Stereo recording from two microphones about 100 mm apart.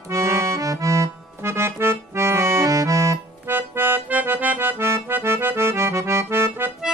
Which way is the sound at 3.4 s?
20° right (ahead or behind).